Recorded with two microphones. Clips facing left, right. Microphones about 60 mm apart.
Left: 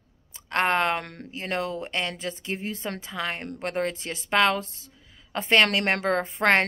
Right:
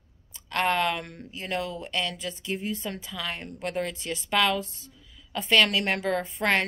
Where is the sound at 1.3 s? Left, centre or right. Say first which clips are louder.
Left 2 dB; left.